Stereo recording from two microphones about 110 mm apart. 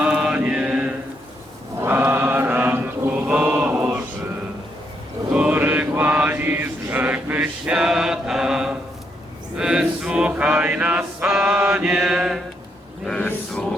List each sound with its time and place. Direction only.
0.0 s mantra: 10° right (ahead or behind)
5.3 s chant: 15° right (ahead or behind)
9.6 s male singing: 5° right (ahead or behind)
11.7 s mantra: 10° right (ahead or behind)
13.1 s a sound: 5° left (ahead or behind)